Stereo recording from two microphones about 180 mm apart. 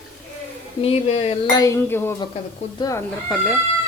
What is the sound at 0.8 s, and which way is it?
Speech, 35° left (ahead or behind).